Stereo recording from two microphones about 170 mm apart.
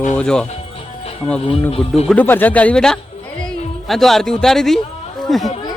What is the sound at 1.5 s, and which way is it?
Speech, 35° left (ahead or behind).